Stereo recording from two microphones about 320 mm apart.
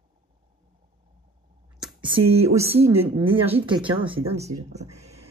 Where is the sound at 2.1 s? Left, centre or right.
Centre.